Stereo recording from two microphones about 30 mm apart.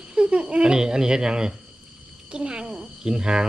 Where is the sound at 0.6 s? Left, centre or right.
Right.